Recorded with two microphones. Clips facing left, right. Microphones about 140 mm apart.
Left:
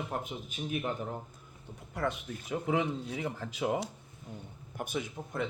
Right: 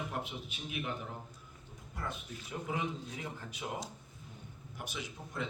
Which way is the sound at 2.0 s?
75° left (ahead or behind).